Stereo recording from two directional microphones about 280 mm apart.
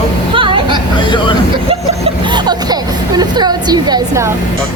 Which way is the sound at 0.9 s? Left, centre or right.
Centre.